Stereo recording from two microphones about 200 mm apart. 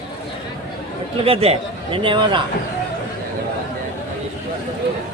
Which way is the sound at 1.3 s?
30° right (ahead or behind).